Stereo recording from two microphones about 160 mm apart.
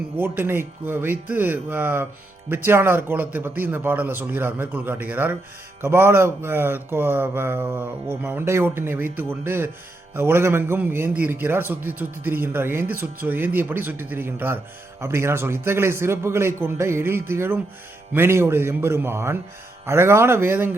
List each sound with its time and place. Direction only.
0.2 s a man's voice: 15° right (ahead or behind)